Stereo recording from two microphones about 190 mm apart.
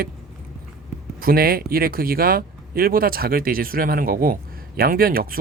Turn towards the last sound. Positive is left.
turn(degrees=-50)  # may be behind; listen again after turning